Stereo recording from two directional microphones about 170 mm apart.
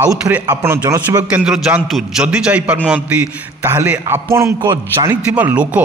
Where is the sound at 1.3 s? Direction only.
5° right (ahead or behind).